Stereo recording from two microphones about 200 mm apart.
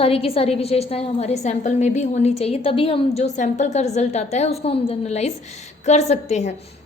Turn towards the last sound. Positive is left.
turn(degrees=35)  # may be behind; listen again after turning